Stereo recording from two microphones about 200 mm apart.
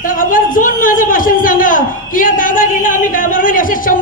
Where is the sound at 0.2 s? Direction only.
45° left (ahead or behind).